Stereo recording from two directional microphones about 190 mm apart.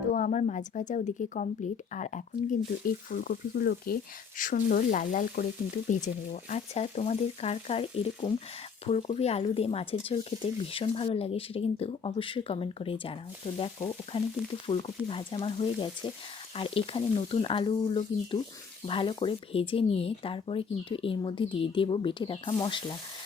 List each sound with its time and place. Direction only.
0.1 s speech: 40° left (ahead or behind)
8.9 s speech: 30° left (ahead or behind)